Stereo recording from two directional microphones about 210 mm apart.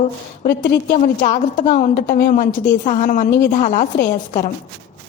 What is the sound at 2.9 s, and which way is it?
A woman's voice, 35° left (ahead or behind).